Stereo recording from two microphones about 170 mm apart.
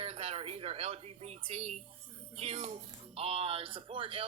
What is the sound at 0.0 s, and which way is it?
Speech, 35° right (ahead or behind).